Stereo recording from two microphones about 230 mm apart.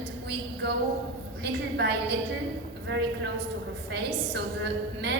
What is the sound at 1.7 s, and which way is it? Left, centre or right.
Speech, right.